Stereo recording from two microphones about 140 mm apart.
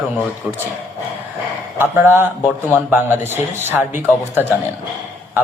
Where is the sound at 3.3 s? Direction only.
15° right (ahead or behind).